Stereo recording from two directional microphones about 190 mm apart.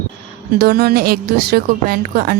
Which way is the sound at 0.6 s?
55° right (ahead or behind).